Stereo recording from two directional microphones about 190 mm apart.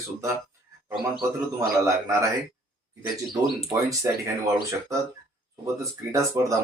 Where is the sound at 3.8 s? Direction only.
15° right (ahead or behind).